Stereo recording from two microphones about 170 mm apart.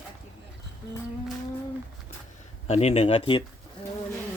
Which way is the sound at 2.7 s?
40° left (ahead or behind).